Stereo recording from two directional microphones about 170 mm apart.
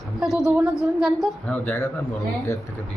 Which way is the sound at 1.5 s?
10° left (ahead or behind).